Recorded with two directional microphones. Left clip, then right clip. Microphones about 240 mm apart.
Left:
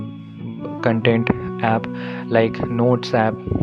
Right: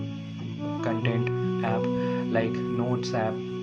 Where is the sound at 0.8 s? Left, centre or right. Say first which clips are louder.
Left 12 dB; left.